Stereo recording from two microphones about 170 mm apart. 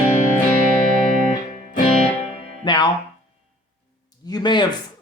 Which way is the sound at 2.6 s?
25° left (ahead or behind).